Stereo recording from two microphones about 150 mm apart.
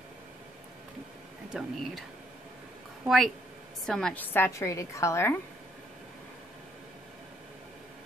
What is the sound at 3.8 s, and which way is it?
A woman's voice, 5° left (ahead or behind).